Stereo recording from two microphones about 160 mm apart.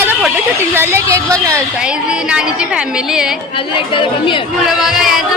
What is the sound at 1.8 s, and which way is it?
Speech, 5° right (ahead or behind).